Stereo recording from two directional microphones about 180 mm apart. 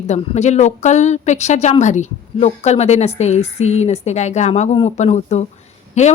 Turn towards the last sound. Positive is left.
turn(degrees=40)  # may be behind; listen again after turning